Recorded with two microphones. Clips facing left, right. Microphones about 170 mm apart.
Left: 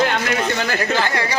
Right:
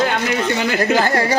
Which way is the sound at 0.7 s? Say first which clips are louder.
Right 4 dB; 10° right (ahead or behind).